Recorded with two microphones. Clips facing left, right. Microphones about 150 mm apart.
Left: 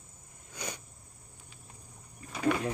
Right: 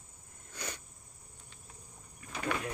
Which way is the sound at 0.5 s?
10° left (ahead or behind).